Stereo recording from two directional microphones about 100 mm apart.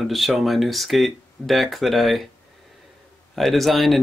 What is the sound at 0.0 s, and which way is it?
Speech, centre (ahead or behind).